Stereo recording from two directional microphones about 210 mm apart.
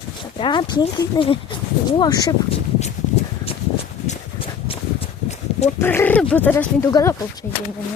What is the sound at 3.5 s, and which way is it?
Clip-clop, 25° left (ahead or behind).